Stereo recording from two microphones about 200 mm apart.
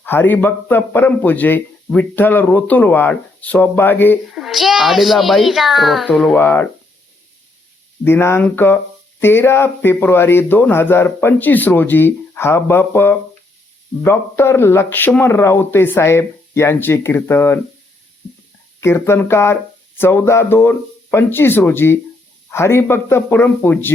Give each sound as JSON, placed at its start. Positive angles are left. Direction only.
{"t": 0.0, "sound": "speech", "side_deg": 10}
{"t": 4.3, "sound": "a child's voice", "side_deg": 0}
{"t": 8.0, "sound": "speech", "side_deg": 10}
{"t": 18.8, "sound": "speech", "side_deg": 10}